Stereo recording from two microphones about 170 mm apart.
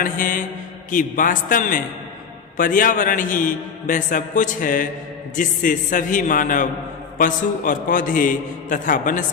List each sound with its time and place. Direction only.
0.0 s a man's voice: 55° left (ahead or behind)